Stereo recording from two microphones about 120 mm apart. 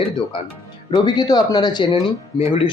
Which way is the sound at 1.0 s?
35° left (ahead or behind).